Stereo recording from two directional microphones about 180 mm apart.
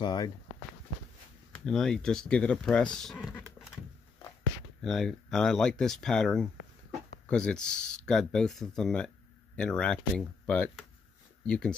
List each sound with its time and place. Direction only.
0.0 s speech: 25° left (ahead or behind)
1.5 s speech: 5° left (ahead or behind)
4.8 s speech: centre (ahead or behind)